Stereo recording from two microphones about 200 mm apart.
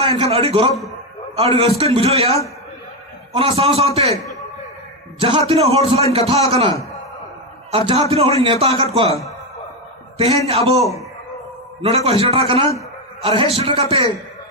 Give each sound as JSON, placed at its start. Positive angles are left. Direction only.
{"t": 0.0, "sound": "a man's voice", "side_deg": -30}
{"t": 3.3, "sound": "a man's voice", "side_deg": -30}
{"t": 5.5, "sound": "a man's voice", "side_deg": -30}
{"t": 7.7, "sound": "a man's voice", "side_deg": -30}
{"t": 10.8, "sound": "a man's voice", "side_deg": 0}
{"t": 11.8, "sound": "a man's voice", "side_deg": -30}